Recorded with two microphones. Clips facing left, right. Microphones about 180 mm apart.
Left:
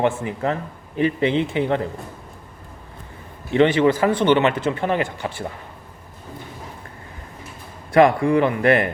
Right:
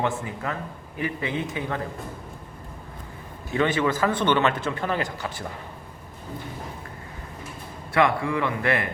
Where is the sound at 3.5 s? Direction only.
25° left (ahead or behind).